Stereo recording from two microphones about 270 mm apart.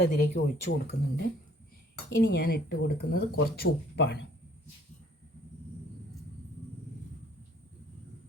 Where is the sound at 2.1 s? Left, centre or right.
Left.